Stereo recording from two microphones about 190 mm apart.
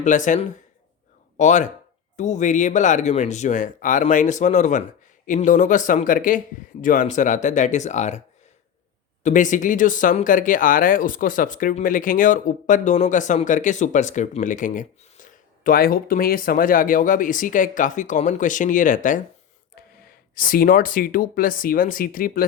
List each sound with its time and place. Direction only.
0.0 s speech: 40° left (ahead or behind)
9.2 s speech: 40° left (ahead or behind)
20.3 s speech: 50° left (ahead or behind)